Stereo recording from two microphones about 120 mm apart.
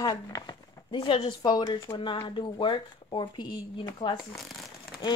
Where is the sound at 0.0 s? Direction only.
35° left (ahead or behind).